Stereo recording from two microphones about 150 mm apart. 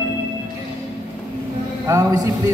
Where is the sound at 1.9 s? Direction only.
20° right (ahead or behind).